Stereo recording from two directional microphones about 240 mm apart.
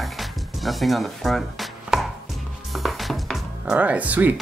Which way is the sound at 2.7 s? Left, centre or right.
Centre.